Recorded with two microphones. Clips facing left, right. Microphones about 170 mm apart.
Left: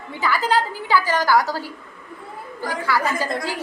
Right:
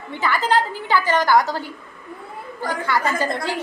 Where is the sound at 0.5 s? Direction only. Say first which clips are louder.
Even; 5° left (ahead or behind).